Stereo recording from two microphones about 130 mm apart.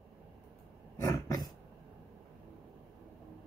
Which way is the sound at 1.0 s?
30° left (ahead or behind).